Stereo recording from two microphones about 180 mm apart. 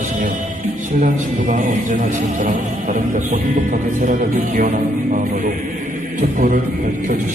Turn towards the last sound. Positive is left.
turn(degrees=-50)  # may be behind; listen again after turning